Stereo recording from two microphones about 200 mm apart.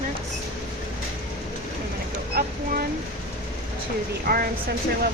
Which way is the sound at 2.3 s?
50° right (ahead or behind).